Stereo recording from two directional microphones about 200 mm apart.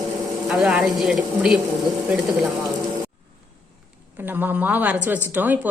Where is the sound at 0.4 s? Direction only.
Centre (ahead or behind).